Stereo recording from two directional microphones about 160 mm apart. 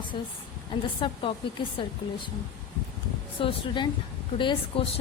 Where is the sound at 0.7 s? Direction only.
30° left (ahead or behind).